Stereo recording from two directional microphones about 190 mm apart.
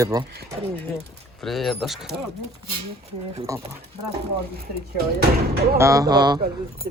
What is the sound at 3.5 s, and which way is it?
Speech, 15° right (ahead or behind).